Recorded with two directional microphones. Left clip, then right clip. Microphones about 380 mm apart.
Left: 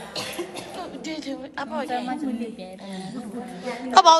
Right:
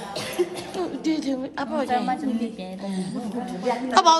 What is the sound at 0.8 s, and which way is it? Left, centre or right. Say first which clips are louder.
A woman's voice: right 10 dB; centre.